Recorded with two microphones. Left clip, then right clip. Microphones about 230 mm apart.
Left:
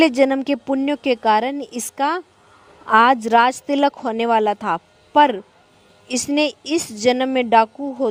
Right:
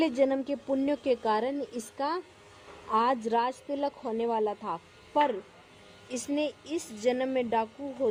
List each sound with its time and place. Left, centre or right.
0.2 s a woman's voice: left